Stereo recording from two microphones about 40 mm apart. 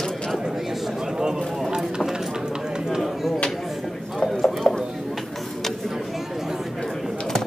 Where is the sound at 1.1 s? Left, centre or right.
Centre.